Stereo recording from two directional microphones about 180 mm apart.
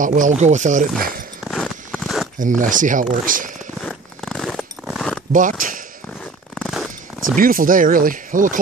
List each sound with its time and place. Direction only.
0.0 s speech: 45° right (ahead or behind)
1.4 s biting: centre (ahead or behind)
2.3 s speech: 45° right (ahead or behind)
3.8 s zipper: 5° left (ahead or behind)
5.3 s speech: 45° right (ahead or behind)
6.5 s purr: centre (ahead or behind)
7.3 s speech: 50° right (ahead or behind)